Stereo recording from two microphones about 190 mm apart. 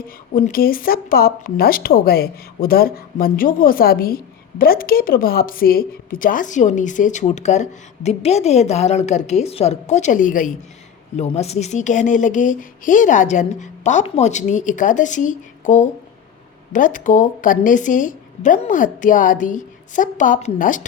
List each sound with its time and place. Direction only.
0.3 s speech: 50° left (ahead or behind)